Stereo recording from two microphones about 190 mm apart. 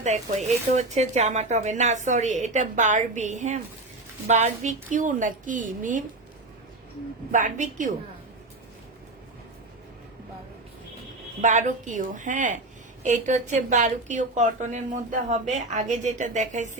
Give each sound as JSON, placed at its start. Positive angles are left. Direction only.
{"t": 0.4, "sound": "a woman's voice", "side_deg": -35}
{"t": 7.3, "sound": "speech", "side_deg": -40}
{"t": 11.3, "sound": "speech", "side_deg": -40}